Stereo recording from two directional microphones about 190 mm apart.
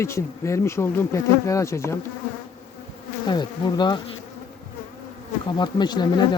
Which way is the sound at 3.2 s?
25° left (ahead or behind).